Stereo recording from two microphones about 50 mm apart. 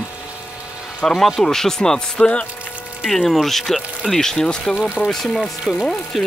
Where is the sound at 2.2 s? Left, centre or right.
Left.